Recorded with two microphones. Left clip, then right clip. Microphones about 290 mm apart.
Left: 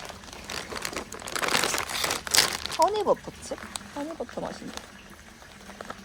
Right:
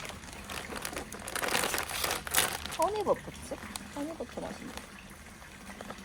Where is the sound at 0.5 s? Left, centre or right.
Left.